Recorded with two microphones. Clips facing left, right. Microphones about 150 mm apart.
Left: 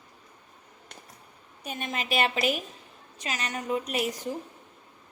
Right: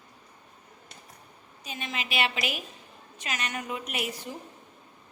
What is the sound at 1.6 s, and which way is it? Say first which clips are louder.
A woman's voice: left 3 dB; 50° left (ahead or behind).